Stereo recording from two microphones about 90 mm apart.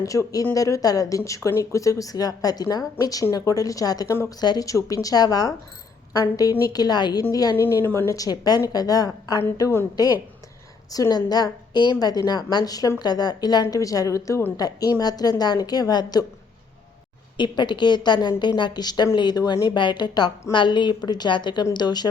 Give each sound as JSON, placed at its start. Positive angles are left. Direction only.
{"t": 0.0, "sound": "a woman's voice", "side_deg": 40}
{"t": 7.7, "sound": "a woman's voice", "side_deg": 30}
{"t": 17.3, "sound": "a woman's voice", "side_deg": 60}